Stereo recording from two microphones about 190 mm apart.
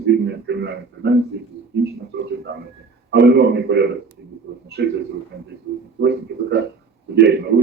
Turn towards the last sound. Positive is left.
turn(degrees=-65)  # may be behind; listen again after turning